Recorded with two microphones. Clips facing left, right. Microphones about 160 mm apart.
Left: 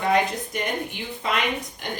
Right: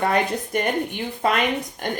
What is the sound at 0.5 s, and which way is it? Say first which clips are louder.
Speech: right 7 dB; 55° right (ahead or behind).